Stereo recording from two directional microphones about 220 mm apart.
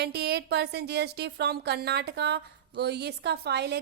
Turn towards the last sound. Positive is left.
turn(degrees=-50)  # may be behind; listen again after turning